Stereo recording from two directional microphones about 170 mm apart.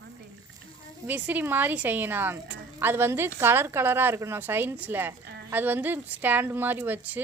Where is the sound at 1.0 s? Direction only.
10° right (ahead or behind).